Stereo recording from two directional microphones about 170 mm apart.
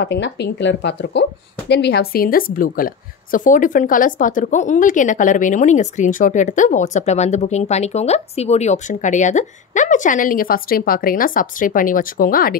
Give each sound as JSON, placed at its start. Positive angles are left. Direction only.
{"t": 0.0, "sound": "a woman's voice", "side_deg": 90}